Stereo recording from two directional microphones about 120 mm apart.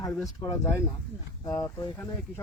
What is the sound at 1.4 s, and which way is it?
Speech, 25° left (ahead or behind).